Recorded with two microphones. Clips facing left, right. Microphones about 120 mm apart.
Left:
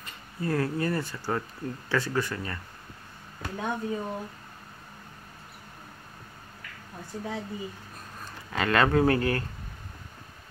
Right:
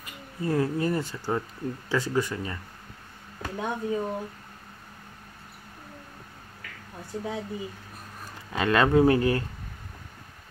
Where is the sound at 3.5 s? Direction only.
10° right (ahead or behind).